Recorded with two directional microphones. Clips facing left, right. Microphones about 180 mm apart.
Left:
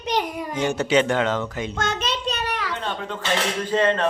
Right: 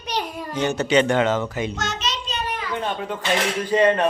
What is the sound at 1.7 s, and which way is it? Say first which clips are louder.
Child singing: left 2 dB; 55° left (ahead or behind).